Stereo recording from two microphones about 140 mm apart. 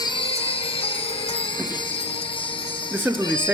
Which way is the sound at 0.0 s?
40° left (ahead or behind).